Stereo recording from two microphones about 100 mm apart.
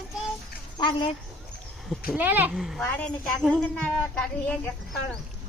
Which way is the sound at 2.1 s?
20° right (ahead or behind).